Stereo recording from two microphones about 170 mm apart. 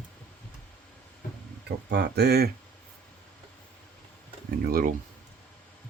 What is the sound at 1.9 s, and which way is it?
Speech, 75° right (ahead or behind).